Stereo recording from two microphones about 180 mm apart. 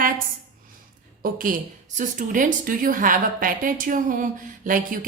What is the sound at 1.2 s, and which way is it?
A woman's voice, 50° right (ahead or behind).